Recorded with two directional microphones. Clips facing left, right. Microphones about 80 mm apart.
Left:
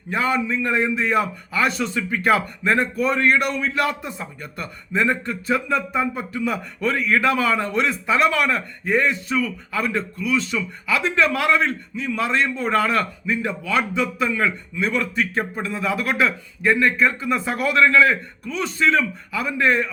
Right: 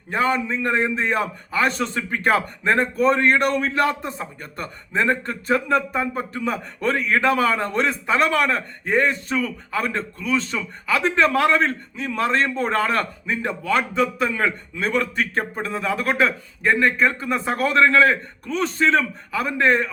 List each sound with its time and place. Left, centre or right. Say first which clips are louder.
0.1 s a man's voice: even; right